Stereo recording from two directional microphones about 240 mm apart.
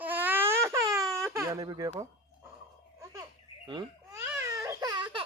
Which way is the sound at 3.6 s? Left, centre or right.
Centre.